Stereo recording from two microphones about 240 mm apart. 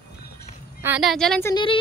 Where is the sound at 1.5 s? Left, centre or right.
Left.